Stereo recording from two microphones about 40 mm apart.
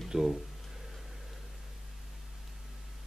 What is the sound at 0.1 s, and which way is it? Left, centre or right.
Speech, right.